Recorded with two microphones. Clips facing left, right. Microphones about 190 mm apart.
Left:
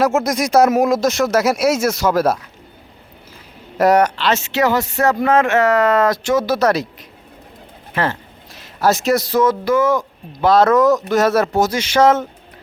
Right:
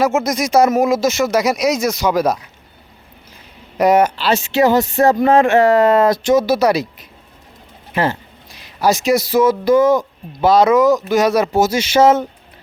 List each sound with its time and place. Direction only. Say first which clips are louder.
0.0 s speech: even; centre (ahead or behind)
3.8 s speech: right 1 dB; centre (ahead or behind)
4.4 s speech: right 7 dB; 15° right (ahead or behind)
5.0 s a sound: right 2 dB; 35° right (ahead or behind)
5.7 s speech: right 3 dB; 15° right (ahead or behind)
8.8 s speech: right 1 dB; centre (ahead or behind)
10.8 s speech: right 1 dB; centre (ahead or behind)